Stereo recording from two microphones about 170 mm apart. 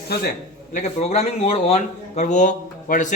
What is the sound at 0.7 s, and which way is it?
Speech, 40° left (ahead or behind).